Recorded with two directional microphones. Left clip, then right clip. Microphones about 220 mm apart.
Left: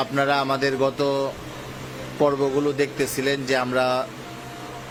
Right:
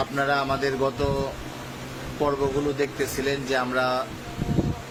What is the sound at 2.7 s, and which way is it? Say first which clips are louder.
Speech: left 3 dB; 20° left (ahead or behind).